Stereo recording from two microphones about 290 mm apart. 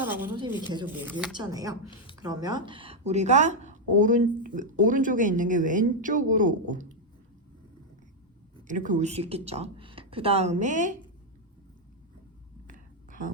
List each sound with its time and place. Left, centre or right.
0.0 s a woman's voice: centre; by 6.8 s right
8.6 s speech: right
12.6 s a sound: right